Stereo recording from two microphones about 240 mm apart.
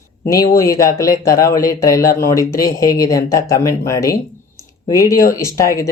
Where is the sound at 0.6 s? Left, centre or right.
Centre.